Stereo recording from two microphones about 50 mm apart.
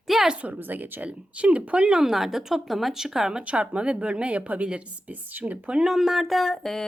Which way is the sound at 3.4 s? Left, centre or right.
Right.